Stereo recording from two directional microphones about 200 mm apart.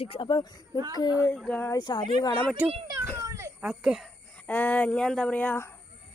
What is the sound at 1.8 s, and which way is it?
Speech, 20° left (ahead or behind).